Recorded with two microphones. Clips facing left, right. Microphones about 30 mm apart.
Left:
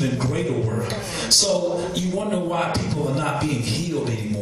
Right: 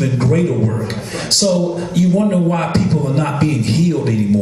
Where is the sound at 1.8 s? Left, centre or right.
Right.